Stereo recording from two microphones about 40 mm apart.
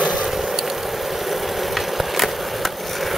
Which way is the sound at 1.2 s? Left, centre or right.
Centre.